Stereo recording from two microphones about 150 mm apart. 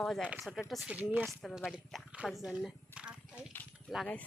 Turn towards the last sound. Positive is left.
turn(degrees=0)  # may be behind; listen again after turning